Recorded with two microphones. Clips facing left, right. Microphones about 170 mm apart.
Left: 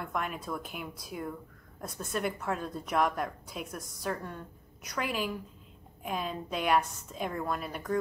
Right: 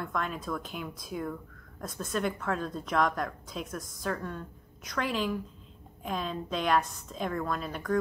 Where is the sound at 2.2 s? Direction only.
10° left (ahead or behind).